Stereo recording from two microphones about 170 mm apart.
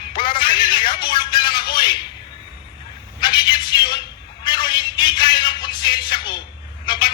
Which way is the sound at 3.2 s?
25° left (ahead or behind).